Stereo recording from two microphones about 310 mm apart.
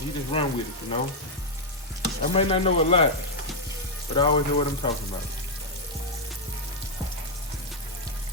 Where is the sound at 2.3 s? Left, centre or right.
Centre.